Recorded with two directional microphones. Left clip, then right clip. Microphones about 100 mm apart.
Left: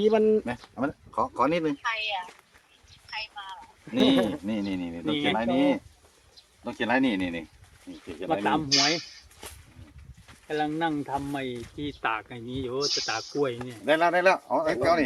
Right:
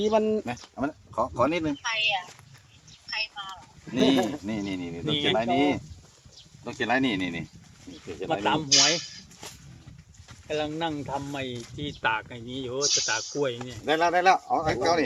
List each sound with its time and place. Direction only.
0.0 s speech: 80° left
0.8 s speech: 65° left (ahead or behind)
1.8 s speech: 25° right (ahead or behind)
3.1 s a sound: 20° right (ahead or behind)
3.9 s bird: 50° left (ahead or behind)
4.2 s speech: 60° left (ahead or behind)
5.0 s speech: 10° left (ahead or behind)
5.4 s speech: 55° left (ahead or behind)
8.3 s speech: centre (ahead or behind)
10.5 s speech: centre (ahead or behind)
13.8 s speech: 45° left (ahead or behind)